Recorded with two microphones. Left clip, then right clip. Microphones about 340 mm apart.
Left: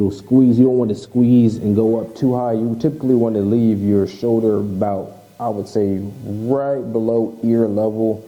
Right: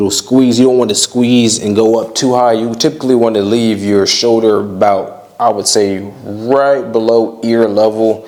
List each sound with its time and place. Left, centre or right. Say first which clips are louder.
0.3 s speech: right 5 dB; centre
1.8 s speech: right 7 dB; right; by 2.9 s centre
3.0 s speech: right 6 dB; centre
3.3 s speech: right 6 dB; centre
4.3 s speech: right 7 dB; centre
6.9 s speech: right 8 dB; centre